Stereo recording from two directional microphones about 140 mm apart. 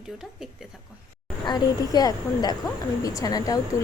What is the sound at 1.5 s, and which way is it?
A woman's voice, 30° left (ahead or behind).